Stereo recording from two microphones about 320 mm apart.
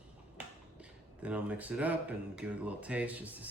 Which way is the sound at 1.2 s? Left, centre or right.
Centre.